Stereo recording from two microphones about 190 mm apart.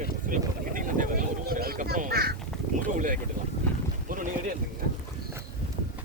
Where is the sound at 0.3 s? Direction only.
45° right (ahead or behind).